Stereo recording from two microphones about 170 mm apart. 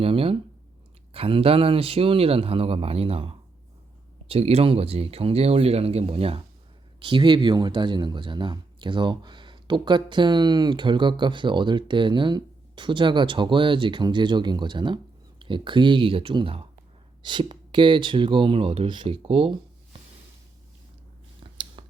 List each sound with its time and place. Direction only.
0.0 s speech: 35° right (ahead or behind)
21.4 s biting: 30° right (ahead or behind)